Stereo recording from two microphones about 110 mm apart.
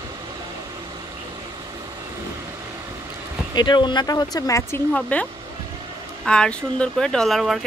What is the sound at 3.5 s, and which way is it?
A woman's voice, 40° left (ahead or behind).